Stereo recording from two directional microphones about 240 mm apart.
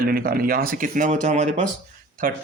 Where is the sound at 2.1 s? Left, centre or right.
Right.